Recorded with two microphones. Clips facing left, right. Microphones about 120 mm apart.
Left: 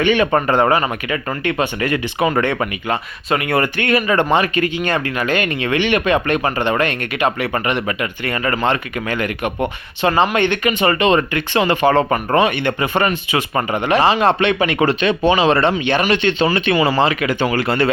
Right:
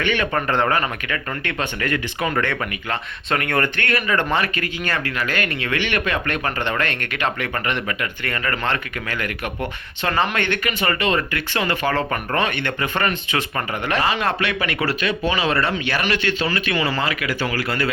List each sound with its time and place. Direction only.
0.0 s speech: 15° left (ahead or behind)
16.7 s speech: 15° left (ahead or behind)
17.0 s speech: 25° left (ahead or behind)